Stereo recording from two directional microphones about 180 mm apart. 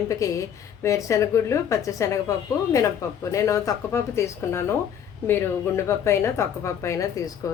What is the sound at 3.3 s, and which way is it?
A woman's voice, 20° left (ahead or behind).